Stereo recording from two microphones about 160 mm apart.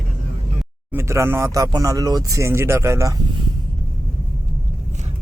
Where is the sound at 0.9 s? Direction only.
15° right (ahead or behind).